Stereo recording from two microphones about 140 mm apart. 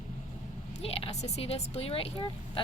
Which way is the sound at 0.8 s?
45° left (ahead or behind).